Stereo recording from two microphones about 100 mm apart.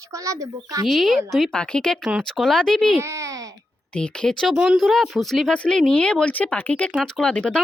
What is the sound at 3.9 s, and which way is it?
Speech, 10° left (ahead or behind).